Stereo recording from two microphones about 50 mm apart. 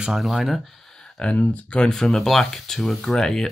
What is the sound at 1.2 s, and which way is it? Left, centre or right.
Speech, left.